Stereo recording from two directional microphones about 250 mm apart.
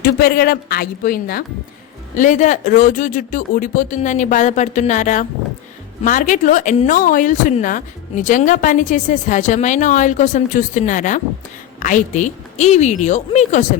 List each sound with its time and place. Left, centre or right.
0.0 s a woman's voice: left